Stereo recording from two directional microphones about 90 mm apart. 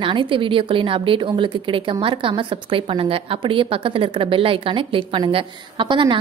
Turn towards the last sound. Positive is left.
turn(degrees=-65)  # may be behind; listen again after turning